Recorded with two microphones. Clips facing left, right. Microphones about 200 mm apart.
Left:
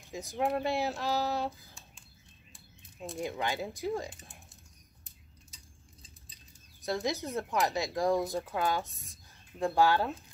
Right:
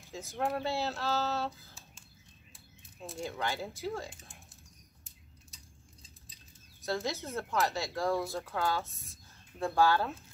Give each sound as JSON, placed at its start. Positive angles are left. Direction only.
{"t": 0.1, "sound": "speech", "side_deg": 15}
{"t": 3.2, "sound": "speech", "side_deg": 15}
{"t": 4.1, "sound": "speech", "side_deg": 0}
{"t": 5.5, "sound": "a sound", "side_deg": 0}
{"t": 6.8, "sound": "speech", "side_deg": 15}